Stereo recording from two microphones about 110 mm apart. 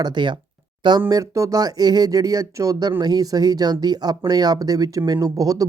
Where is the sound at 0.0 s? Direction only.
45° right (ahead or behind).